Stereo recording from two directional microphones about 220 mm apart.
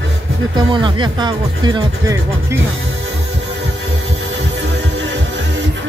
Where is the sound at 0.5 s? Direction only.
20° right (ahead or behind).